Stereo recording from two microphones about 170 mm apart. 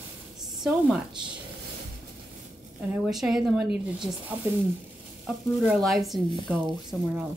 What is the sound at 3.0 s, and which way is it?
A woman's voice, centre (ahead or behind).